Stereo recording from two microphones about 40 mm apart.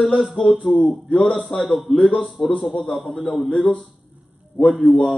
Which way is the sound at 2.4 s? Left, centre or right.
Left.